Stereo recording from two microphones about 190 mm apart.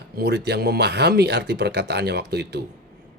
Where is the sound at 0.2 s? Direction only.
60° right (ahead or behind).